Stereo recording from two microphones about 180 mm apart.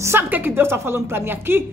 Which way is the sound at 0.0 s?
10° right (ahead or behind).